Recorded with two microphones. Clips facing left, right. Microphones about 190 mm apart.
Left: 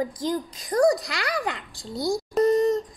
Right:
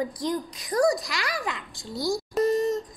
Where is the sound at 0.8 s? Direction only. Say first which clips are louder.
Left 3 dB; 60° left (ahead or behind).